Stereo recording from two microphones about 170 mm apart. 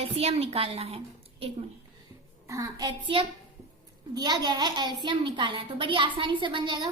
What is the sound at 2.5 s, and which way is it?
A child's voice, 20° right (ahead or behind).